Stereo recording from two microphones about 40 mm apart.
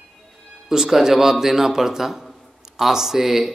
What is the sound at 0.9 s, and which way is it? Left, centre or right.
Speech, centre.